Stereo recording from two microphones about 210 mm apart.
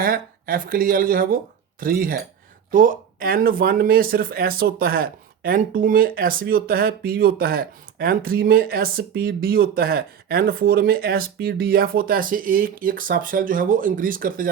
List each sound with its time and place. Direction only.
0.0 s speech: 40° right (ahead or behind)